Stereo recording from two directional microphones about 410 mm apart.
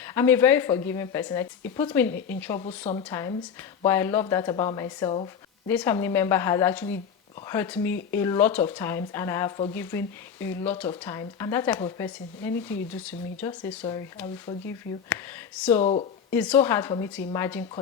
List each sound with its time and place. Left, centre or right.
0.0 s speech: centre
15.8 s speech: centre
16.3 s speech: centre